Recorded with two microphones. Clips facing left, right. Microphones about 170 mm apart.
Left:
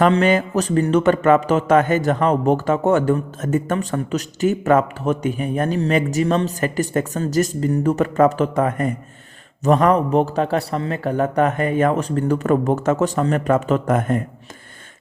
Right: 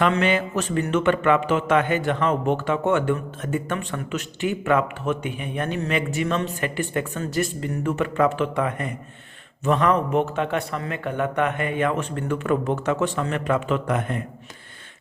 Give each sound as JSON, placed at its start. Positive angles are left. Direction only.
{"t": 0.0, "sound": "speech", "side_deg": 40}